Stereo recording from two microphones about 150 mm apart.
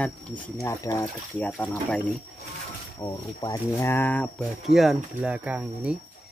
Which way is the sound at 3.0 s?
25° left (ahead or behind).